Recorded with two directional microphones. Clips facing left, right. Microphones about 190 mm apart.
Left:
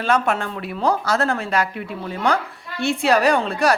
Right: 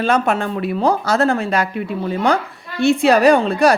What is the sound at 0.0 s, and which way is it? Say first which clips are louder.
A woman's voice: right 3 dB; 20° right (ahead or behind).